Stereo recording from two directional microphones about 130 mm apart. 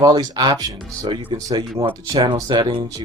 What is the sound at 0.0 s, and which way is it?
Speech, 30° right (ahead or behind).